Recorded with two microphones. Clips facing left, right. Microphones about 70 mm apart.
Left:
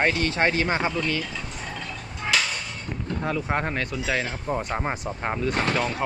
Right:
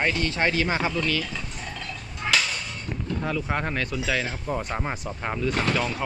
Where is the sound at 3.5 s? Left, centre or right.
Left.